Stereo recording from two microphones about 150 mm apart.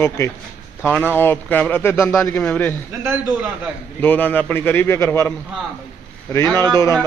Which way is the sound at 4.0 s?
10° left (ahead or behind).